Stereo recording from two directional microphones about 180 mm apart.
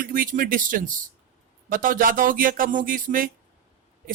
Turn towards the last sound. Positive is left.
turn(degrees=-50)  # may be behind; listen again after turning